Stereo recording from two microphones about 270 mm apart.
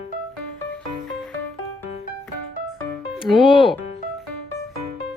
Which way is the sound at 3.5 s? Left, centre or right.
Centre.